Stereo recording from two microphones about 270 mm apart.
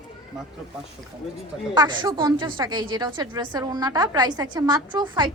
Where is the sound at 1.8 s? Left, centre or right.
Centre.